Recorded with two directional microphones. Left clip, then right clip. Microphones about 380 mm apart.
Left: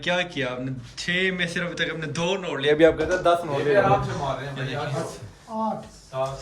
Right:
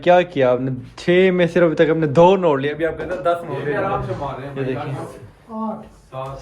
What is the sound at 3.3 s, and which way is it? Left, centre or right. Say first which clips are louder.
Speech: right 1 dB; centre.